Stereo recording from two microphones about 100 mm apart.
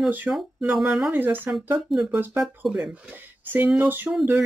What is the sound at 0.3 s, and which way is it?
Speech, 15° right (ahead or behind).